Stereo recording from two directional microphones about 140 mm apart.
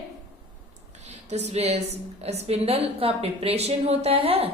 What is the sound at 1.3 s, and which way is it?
A woman's voice, 50° right (ahead or behind).